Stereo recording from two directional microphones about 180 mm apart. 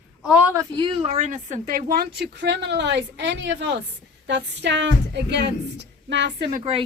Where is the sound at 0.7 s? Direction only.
30° right (ahead or behind); by 6.6 s 65° right (ahead or behind).